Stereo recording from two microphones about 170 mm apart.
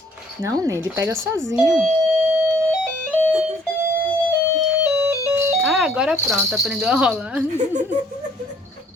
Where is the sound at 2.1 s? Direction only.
5° right (ahead or behind).